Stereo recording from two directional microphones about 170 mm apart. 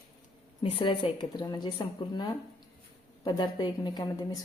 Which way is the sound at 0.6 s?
30° left (ahead or behind).